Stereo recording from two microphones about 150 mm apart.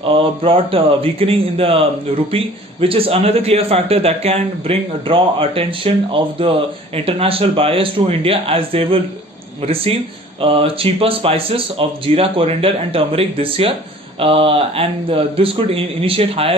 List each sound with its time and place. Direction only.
0.0 s a man's voice: 35° right (ahead or behind)